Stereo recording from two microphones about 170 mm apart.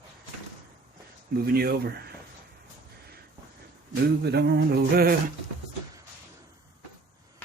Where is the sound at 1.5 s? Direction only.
70° right (ahead or behind).